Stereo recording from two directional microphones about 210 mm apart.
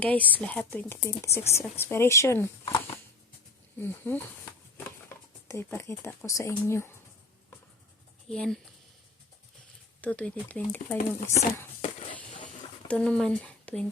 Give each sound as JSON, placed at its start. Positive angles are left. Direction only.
{"t": 0.0, "sound": "speech", "side_deg": 5}
{"t": 3.8, "sound": "speech", "side_deg": 10}
{"t": 5.5, "sound": "speech", "side_deg": 15}
{"t": 8.3, "sound": "speech", "side_deg": 0}
{"t": 10.0, "sound": "speech", "side_deg": 5}
{"t": 10.9, "sound": "speech", "side_deg": 35}
{"t": 12.9, "sound": "speech", "side_deg": 5}